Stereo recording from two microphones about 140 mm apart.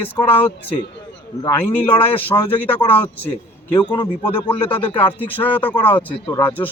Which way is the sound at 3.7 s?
30° left (ahead or behind).